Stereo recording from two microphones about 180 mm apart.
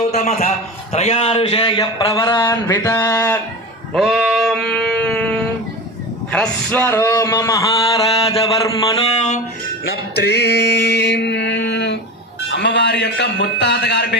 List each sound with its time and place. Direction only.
0.0 s a man's voice: 40° left (ahead or behind); by 3.4 s 15° left (ahead or behind)
3.9 s sheep: centre (ahead or behind)
6.3 s a man's voice: 5° left (ahead or behind)
10.2 s a sound: 65° left (ahead or behind)